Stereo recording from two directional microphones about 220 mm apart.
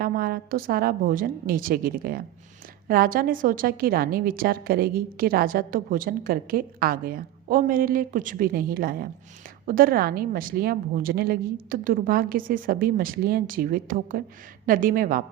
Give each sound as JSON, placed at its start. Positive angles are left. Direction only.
{"t": 0.0, "sound": "a woman's voice", "side_deg": -45}